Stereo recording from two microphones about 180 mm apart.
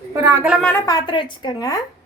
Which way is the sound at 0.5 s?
5° left (ahead or behind).